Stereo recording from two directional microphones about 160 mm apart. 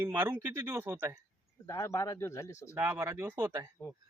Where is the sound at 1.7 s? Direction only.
20° left (ahead or behind).